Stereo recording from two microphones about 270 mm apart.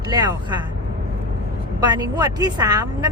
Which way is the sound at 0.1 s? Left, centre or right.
Centre.